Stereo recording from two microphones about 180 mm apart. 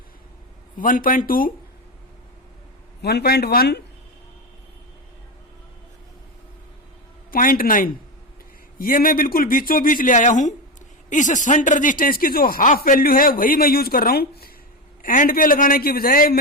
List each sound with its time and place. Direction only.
0.8 s speech: 50° left (ahead or behind)
3.0 s speech: 65° left (ahead or behind)
7.3 s speech: 50° left (ahead or behind)
15.0 s speech: 50° left (ahead or behind)